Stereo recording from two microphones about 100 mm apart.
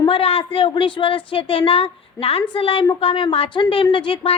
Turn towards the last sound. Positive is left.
turn(degrees=60)  # may be behind; listen again after turning